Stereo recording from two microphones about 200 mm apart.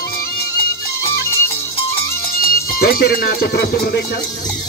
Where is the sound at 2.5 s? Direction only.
50° left (ahead or behind).